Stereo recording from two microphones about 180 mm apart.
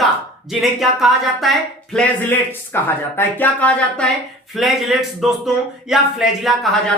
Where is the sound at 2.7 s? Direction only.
10° left (ahead or behind).